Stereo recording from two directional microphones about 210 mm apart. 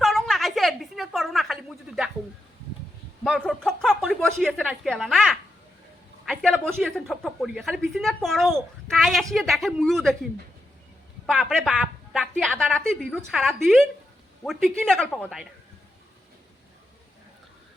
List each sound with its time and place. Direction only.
0.0 s a sound: centre (ahead or behind)
3.2 s speech: 5° left (ahead or behind)
11.3 s speech: centre (ahead or behind)